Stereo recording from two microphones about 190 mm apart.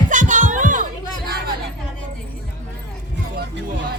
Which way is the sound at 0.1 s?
40° right (ahead or behind).